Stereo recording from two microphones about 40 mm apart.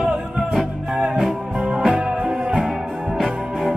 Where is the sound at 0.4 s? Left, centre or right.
Centre.